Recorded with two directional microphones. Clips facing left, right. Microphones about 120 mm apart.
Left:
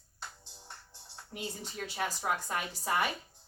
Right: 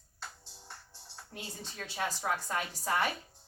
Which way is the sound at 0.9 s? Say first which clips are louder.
Left 2 dB; 15° left (ahead or behind).